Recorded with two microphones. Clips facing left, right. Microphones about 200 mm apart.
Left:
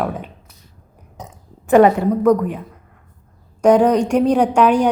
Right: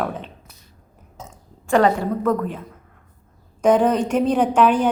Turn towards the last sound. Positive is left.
turn(degrees=10)  # may be behind; listen again after turning